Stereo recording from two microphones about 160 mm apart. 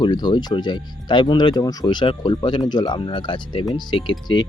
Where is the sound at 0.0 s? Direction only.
25° left (ahead or behind).